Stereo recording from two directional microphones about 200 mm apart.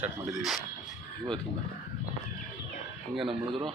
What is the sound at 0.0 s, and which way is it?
Speech, centre (ahead or behind).